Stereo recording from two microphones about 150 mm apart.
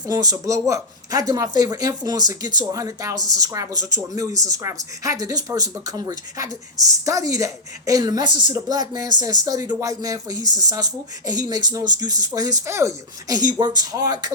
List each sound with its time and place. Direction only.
0.1 s speech: 25° right (ahead or behind)